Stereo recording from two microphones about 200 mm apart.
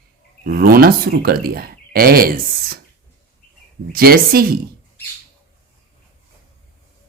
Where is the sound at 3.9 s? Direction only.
50° right (ahead or behind).